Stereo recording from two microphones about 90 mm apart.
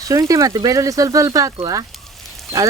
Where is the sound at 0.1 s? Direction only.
40° right (ahead or behind).